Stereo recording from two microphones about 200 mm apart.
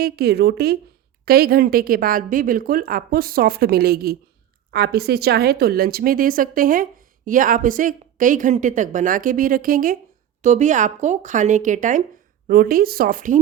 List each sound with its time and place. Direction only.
0.0 s a woman's voice: 55° right (ahead or behind)